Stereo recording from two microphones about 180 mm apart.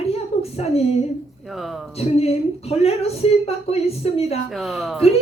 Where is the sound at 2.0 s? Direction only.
35° left (ahead or behind).